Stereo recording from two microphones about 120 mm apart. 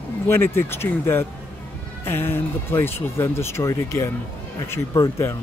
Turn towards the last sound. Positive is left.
turn(degrees=25)  # may be behind; listen again after turning